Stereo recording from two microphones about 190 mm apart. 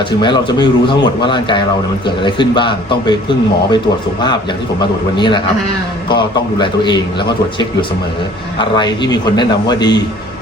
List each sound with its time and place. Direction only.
0.2 s a man's voice: 25° left (ahead or behind)
4.8 s a man's voice: 25° left (ahead or behind)